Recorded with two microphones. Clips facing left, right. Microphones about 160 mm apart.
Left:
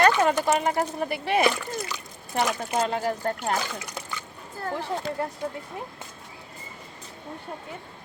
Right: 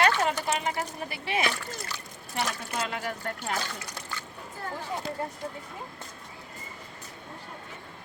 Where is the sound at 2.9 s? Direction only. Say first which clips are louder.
Left 7 dB; 35° left (ahead or behind).